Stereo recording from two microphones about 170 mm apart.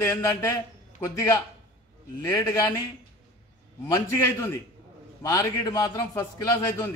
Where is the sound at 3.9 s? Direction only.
15° left (ahead or behind).